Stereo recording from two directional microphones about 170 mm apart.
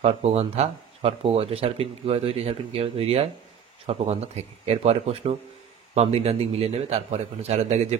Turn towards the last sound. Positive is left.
turn(degrees=-40)  # may be behind; listen again after turning